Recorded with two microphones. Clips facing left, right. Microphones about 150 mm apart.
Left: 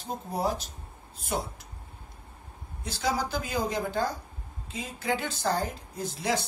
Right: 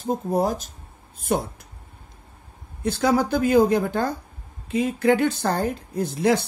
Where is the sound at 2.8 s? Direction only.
55° right (ahead or behind).